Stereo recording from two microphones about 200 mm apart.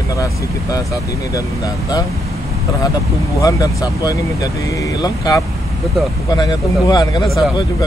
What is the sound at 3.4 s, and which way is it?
Speech, 20° left (ahead or behind).